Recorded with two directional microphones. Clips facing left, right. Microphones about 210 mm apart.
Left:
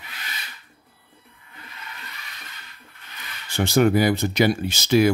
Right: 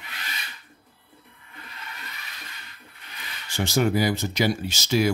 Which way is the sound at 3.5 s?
60° left (ahead or behind).